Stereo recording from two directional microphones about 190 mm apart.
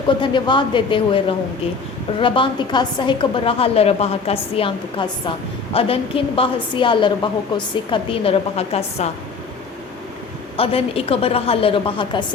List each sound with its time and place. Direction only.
0.2 s a woman's voice: 25° left (ahead or behind)
2.2 s a woman's voice: 25° left (ahead or behind)
10.6 s a woman's voice: 30° left (ahead or behind)